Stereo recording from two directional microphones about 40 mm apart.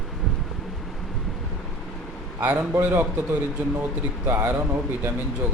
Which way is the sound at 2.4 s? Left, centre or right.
Right.